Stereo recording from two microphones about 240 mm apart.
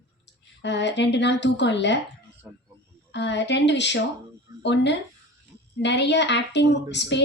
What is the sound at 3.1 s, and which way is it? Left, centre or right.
A woman's voice, left.